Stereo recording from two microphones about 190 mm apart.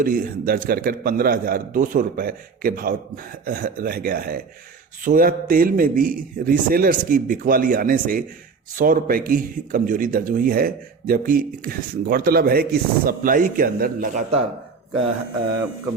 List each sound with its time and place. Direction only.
0.0 s speech: 50° right (ahead or behind)